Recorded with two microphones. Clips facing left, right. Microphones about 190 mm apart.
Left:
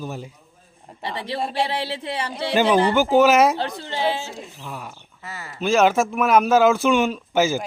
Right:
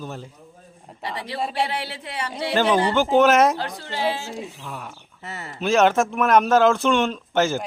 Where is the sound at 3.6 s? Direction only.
25° left (ahead or behind).